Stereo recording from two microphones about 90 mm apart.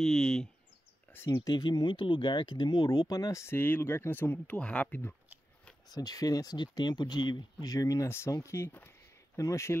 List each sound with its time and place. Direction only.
0.0 s speech: 5° left (ahead or behind)
1.3 s speech: 50° left (ahead or behind); by 5.0 s 15° left (ahead or behind)
5.9 s speech: 45° left (ahead or behind)